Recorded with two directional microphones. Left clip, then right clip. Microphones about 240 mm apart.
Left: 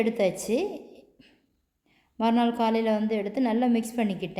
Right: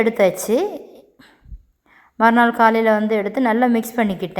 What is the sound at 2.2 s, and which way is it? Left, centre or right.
A woman's voice, centre.